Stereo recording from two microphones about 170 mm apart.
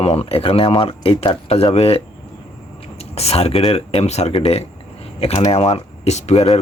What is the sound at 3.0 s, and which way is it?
Speech, 35° left (ahead or behind).